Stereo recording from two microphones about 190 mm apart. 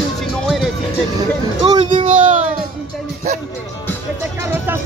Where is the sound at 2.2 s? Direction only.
40° right (ahead or behind).